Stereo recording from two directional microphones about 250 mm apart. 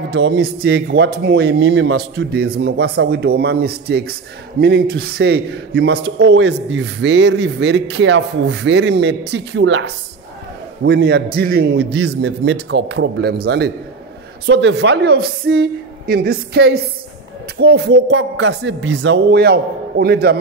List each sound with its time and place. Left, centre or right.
0.1 s a man's voice: right